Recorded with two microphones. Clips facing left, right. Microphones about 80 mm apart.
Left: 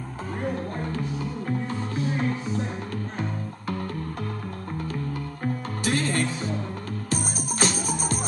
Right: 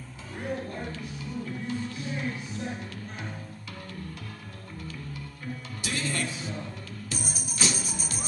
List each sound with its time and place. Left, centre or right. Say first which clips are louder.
0.4 s music: left 3 dB; left
5.4 s music: left 9 dB; left